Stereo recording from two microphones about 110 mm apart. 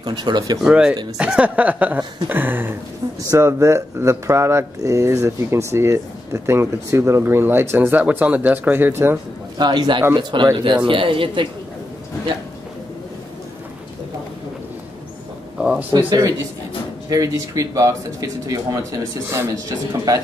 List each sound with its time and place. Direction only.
0.0 s speech: 45° right (ahead or behind)
0.6 s speech: 5° right (ahead or behind)
9.6 s speech: 40° right (ahead or behind)
15.5 s a sound: 10° right (ahead or behind)
16.1 s speech: 30° right (ahead or behind)